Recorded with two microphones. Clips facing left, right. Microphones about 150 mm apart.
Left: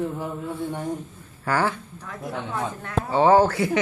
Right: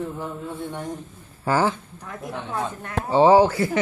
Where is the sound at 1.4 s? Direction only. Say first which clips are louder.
Right 2 dB; 20° right (ahead or behind).